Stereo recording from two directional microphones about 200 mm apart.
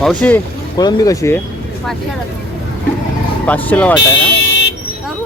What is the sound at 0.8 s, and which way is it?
Speech, 20° left (ahead or behind).